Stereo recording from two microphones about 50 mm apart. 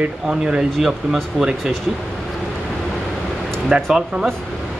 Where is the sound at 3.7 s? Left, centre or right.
Centre.